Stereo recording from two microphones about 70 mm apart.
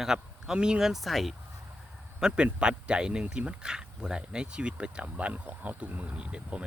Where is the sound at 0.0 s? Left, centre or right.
Centre.